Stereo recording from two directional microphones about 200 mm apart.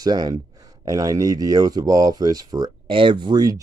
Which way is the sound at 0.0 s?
20° right (ahead or behind).